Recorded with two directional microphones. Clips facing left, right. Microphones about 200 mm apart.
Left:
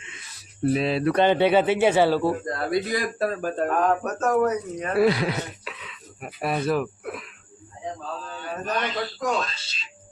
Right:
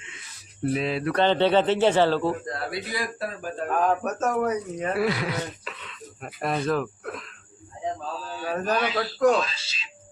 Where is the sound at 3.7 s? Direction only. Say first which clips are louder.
Right 4 dB; 10° right (ahead or behind).